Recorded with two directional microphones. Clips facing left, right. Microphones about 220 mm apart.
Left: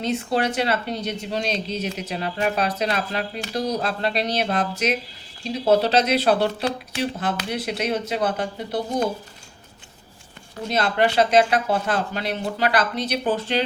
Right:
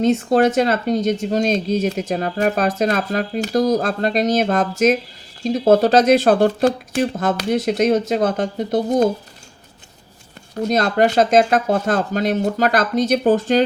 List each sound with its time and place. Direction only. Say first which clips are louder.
0.0 s speech: right 8 dB; 45° right (ahead or behind)
10.6 s speech: right 5 dB; 45° right (ahead or behind)